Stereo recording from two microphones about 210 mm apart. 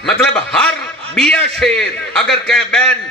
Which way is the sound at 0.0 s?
5° left (ahead or behind).